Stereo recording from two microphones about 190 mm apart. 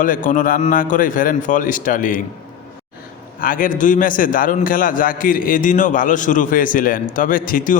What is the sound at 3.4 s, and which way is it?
A man's voice, 45° left (ahead or behind).